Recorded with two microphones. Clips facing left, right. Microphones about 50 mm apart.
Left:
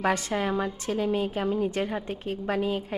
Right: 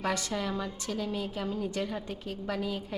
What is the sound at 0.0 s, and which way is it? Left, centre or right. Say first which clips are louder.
A woman's voice: left 5 dB; left.